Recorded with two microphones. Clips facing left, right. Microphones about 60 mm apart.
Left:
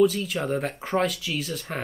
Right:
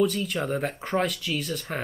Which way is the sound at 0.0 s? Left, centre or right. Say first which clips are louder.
Left 3 dB; centre.